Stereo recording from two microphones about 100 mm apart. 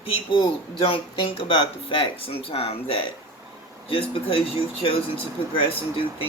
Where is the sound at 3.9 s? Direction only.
65° left (ahead or behind).